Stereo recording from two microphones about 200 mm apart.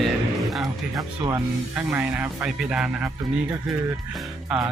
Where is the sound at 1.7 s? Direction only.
10° right (ahead or behind).